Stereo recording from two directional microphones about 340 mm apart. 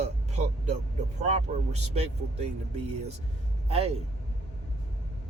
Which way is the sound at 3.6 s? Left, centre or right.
Centre.